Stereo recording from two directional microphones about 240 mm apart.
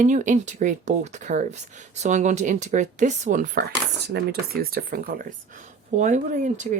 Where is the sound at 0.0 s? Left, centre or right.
Right.